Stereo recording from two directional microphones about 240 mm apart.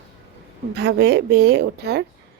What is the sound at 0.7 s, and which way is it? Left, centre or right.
A woman's voice, right.